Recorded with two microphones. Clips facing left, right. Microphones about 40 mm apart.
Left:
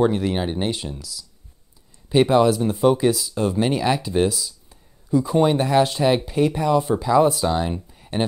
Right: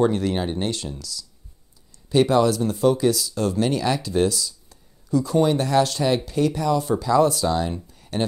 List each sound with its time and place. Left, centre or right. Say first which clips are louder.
0.0 s speech: left 1 dB; centre